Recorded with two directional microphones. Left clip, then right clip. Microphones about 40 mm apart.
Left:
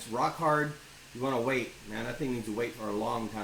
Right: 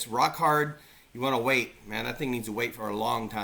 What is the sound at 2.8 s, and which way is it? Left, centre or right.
Speech, right.